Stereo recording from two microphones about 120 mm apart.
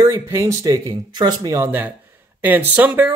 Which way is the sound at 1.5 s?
15° right (ahead or behind).